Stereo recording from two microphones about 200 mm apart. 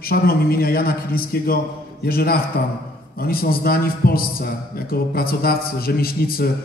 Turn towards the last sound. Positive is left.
turn(degrees=50)  # may be behind; listen again after turning